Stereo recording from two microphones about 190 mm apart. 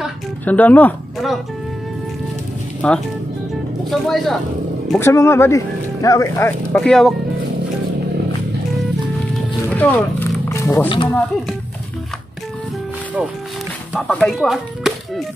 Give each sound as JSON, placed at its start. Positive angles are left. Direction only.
{"t": 0.5, "sound": "speech", "side_deg": 10}
{"t": 2.8, "sound": "speech", "side_deg": 5}
{"t": 4.0, "sound": "speech", "side_deg": 0}
{"t": 4.9, "sound": "speech", "side_deg": 15}
{"t": 9.7, "sound": "speech", "side_deg": 10}
{"t": 10.5, "sound": "music", "side_deg": 15}
{"t": 11.1, "sound": "speech", "side_deg": 5}
{"t": 13.9, "sound": "speech", "side_deg": 0}